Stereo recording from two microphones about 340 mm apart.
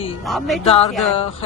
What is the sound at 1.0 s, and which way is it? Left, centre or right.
Speech, centre.